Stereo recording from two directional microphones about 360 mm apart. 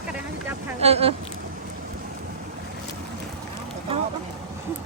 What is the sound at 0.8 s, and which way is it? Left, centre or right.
Speech, centre.